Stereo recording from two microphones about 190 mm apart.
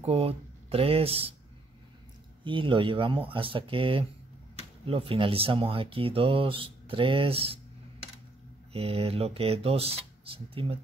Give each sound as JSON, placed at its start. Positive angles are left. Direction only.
{"t": 0.0, "sound": "speech", "side_deg": -30}
{"t": 2.4, "sound": "speech", "side_deg": -25}
{"t": 8.7, "sound": "speech", "side_deg": -30}